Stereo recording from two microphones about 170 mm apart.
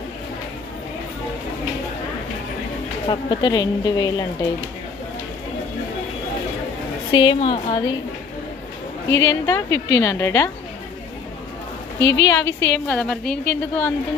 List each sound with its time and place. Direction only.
3.1 s a woman's voice: 25° left (ahead or behind)
7.1 s a woman's voice: 30° left (ahead or behind)
9.0 s a woman's voice: 20° left (ahead or behind)
11.9 s a woman's voice: 15° left (ahead or behind)